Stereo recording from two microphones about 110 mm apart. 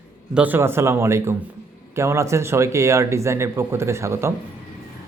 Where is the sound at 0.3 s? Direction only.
15° right (ahead or behind).